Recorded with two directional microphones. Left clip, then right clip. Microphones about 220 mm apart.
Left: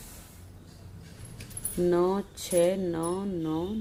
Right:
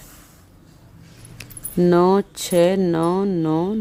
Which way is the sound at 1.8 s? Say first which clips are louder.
Right 10 dB; 50° right (ahead or behind).